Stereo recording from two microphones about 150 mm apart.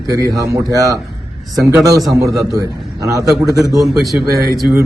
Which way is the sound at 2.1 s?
20° right (ahead or behind).